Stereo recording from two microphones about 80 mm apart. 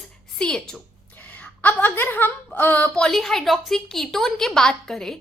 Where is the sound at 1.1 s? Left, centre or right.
Left.